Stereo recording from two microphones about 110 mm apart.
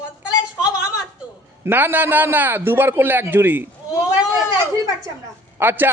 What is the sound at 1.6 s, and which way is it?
Speech, 20° right (ahead or behind).